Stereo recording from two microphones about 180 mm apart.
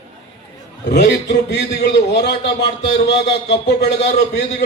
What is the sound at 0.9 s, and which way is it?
A man's voice, 65° left (ahead or behind).